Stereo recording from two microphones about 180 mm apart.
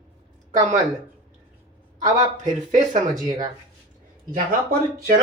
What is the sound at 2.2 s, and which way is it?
Speech, 45° right (ahead or behind).